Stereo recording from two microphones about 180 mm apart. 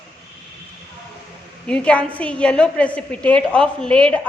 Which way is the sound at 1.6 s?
5° left (ahead or behind).